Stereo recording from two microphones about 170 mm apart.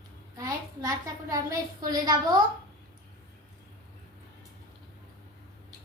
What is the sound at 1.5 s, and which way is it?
Speech, 25° right (ahead or behind).